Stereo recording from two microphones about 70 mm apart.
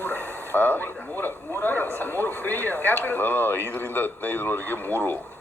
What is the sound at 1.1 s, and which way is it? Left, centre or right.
A man's voice, left.